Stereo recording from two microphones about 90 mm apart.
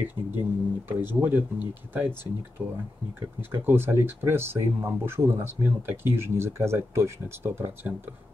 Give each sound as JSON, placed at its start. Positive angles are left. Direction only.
{"t": 0.0, "sound": "speech", "side_deg": -20}